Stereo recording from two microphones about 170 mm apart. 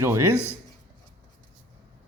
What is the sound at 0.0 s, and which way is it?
Speech, 15° right (ahead or behind).